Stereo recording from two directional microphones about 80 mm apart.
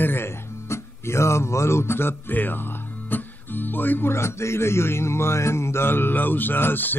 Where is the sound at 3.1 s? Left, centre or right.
Left.